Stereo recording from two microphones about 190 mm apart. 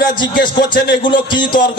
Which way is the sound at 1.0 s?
25° left (ahead or behind).